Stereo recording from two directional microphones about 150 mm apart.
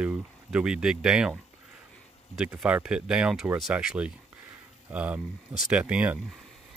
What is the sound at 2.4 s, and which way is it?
Speech, 5° right (ahead or behind).